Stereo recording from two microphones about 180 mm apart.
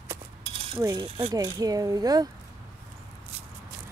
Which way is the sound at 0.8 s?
20° right (ahead or behind).